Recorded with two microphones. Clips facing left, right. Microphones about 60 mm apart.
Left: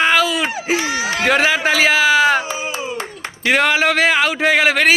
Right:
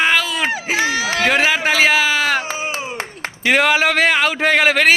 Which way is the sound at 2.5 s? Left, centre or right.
Right.